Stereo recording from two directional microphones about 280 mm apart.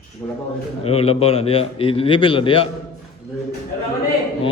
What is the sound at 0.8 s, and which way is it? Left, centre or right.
A man's voice, left.